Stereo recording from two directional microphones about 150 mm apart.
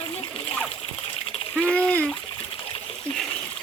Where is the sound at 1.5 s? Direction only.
5° left (ahead or behind).